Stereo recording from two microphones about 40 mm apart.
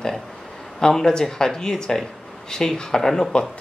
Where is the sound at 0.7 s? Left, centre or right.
Centre.